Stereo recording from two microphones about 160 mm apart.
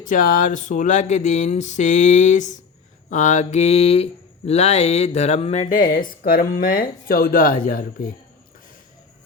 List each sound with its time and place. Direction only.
0.0 s mantra: 60° left (ahead or behind)